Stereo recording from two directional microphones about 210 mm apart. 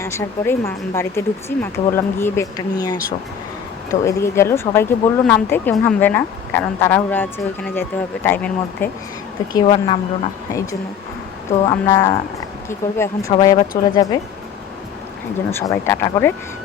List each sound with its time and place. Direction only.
0.0 s speech: 10° left (ahead or behind)
4.0 s speech: 15° left (ahead or behind)
9.6 s speech: 30° left (ahead or behind)
11.5 s speech: 15° left (ahead or behind)
15.4 s speech: 15° left (ahead or behind)